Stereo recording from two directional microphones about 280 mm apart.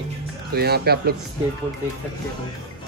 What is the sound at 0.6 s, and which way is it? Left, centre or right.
Speech, right.